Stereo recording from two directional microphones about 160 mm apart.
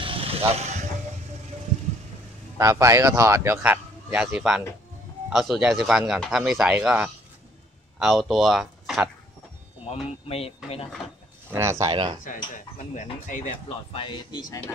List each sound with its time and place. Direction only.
0.0 s vehicle: 35° right (ahead or behind)
2.5 s a man's voice: 20° right (ahead or behind); by 9.1 s 5° right (ahead or behind)
10.2 s speech: 40° left (ahead or behind)
11.8 s speech: 30° right (ahead or behind)
12.5 s speech: 55° left (ahead or behind)
13.9 s speech: 30° left (ahead or behind)